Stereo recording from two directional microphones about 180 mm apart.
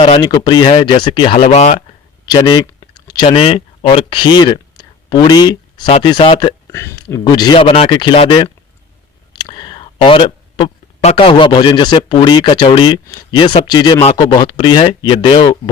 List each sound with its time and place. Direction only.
0.0 s speech: 30° left (ahead or behind)
2.2 s speech: 25° left (ahead or behind)
5.5 s a sound: 25° left (ahead or behind)
5.9 s speech: 25° left (ahead or behind)
6.7 s speech: 15° left (ahead or behind)